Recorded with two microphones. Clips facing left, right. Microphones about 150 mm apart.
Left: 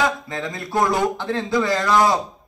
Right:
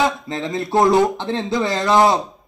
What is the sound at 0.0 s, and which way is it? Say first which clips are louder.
A man's voice: right 2 dB; 25° right (ahead or behind).